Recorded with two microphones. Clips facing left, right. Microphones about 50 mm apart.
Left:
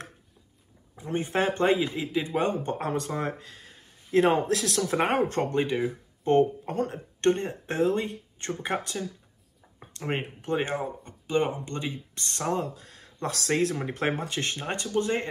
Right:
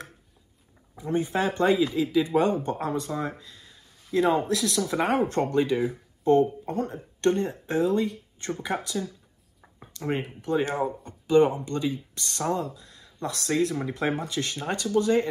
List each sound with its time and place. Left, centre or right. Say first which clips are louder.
0.9 s speech: right 1 dB; left